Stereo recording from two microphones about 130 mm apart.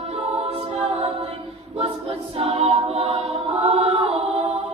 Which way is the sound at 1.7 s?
50° right (ahead or behind).